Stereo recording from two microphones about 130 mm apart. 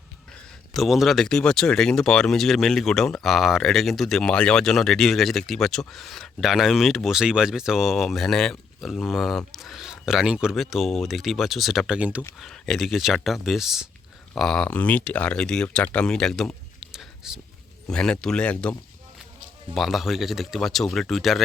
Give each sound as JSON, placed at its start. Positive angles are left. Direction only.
{"t": 0.7, "sound": "speech", "side_deg": 0}
{"t": 12.4, "sound": "speech", "side_deg": 0}
{"t": 17.8, "sound": "speech", "side_deg": 5}